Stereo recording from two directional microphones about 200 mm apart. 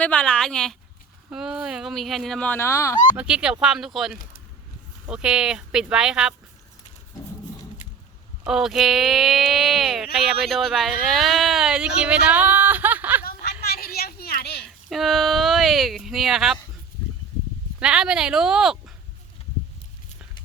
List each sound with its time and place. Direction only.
0.0 s speech: 5° left (ahead or behind)
3.2 s speech: 5° right (ahead or behind)
8.4 s speech: centre (ahead or behind)
13.2 s a sound: 50° left (ahead or behind)
14.8 s speech: centre (ahead or behind)
17.7 s speech: 5° right (ahead or behind)